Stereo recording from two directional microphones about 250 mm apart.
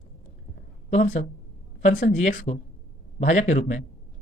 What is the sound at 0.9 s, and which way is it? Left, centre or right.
A woman's voice, left.